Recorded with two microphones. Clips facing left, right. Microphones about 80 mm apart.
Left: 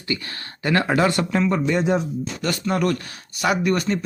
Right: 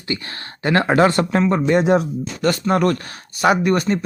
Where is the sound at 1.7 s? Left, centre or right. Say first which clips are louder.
Right 8 dB; right.